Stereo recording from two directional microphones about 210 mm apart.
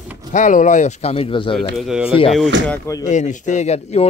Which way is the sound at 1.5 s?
Centre (ahead or behind).